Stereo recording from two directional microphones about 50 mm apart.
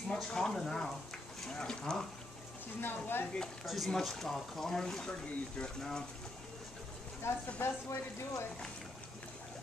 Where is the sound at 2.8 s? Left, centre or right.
Left.